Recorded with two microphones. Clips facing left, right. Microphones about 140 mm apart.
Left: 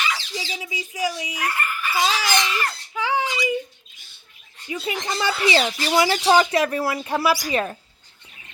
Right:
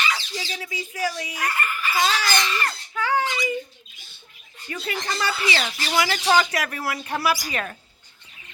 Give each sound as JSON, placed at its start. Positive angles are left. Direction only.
{"t": 0.1, "sound": "a child's voice", "side_deg": 10}
{"t": 5.0, "sound": "speech", "side_deg": 20}